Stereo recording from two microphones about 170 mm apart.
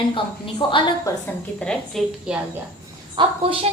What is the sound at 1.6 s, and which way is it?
Speech, 5° left (ahead or behind).